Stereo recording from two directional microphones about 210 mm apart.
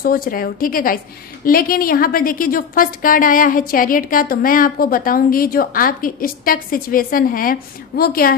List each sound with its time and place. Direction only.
0.0 s a woman's voice: 45° left (ahead or behind)